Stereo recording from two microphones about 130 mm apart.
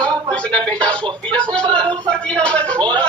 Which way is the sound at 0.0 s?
10° left (ahead or behind).